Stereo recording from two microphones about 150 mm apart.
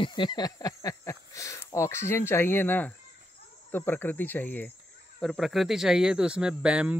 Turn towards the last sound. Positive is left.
turn(degrees=-5)  # may be behind; listen again after turning